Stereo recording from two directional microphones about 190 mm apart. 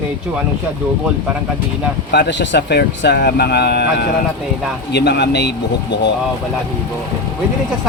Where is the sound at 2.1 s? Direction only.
65° left (ahead or behind).